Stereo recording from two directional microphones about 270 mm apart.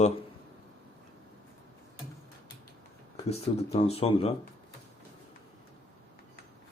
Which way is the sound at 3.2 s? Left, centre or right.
Left.